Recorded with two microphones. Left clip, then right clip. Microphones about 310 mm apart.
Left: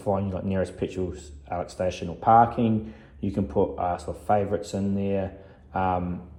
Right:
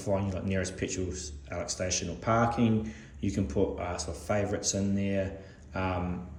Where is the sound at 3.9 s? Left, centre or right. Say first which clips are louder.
Left 7 dB; centre.